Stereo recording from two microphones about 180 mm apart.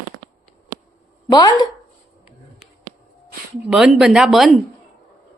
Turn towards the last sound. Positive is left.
turn(degrees=0)  # may be behind; listen again after turning